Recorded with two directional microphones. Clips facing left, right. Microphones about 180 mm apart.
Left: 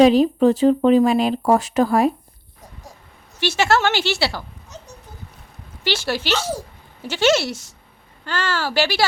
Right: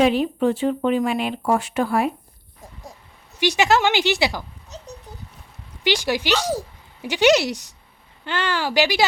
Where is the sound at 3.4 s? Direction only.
15° right (ahead or behind).